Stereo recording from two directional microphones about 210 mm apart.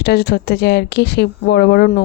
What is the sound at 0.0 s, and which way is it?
A woman's voice, 50° left (ahead or behind).